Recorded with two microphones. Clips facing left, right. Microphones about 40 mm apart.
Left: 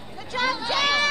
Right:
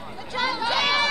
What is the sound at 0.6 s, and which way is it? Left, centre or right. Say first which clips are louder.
Run: right 2 dB; right.